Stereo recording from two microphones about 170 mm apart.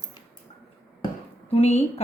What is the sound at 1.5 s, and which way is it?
Speech, 40° left (ahead or behind).